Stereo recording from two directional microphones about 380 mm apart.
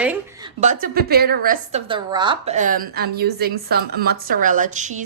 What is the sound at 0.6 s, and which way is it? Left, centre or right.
A woman's voice, right.